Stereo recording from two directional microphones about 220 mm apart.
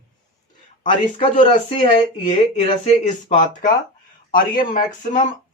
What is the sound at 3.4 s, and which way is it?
Speech, 35° left (ahead or behind).